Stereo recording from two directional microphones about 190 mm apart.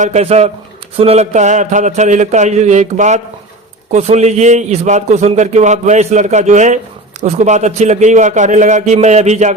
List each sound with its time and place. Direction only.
0.0 s a man's voice: 35° right (ahead or behind)